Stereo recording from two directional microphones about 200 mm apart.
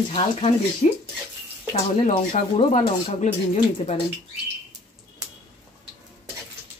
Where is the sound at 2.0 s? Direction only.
35° left (ahead or behind).